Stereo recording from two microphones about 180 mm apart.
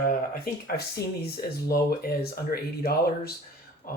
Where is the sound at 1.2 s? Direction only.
60° left (ahead or behind).